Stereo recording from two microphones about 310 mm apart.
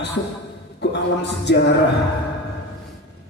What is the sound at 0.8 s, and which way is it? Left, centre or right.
Speech, left.